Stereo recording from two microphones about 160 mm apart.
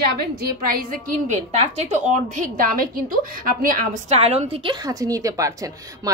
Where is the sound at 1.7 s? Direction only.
45° right (ahead or behind).